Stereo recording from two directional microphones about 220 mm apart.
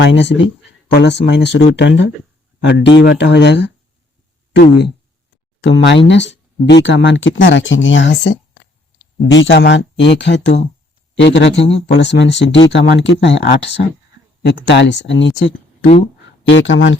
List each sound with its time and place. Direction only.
0.0 s speech: 55° left (ahead or behind)
5.6 s speech: 55° left (ahead or behind)
15.8 s speech: 25° left (ahead or behind)
16.5 s speech: 55° left (ahead or behind)